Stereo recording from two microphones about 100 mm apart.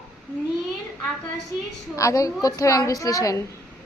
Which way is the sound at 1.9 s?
30° left (ahead or behind).